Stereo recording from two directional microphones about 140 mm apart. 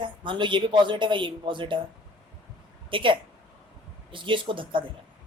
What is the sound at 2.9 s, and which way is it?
Speech, 35° right (ahead or behind).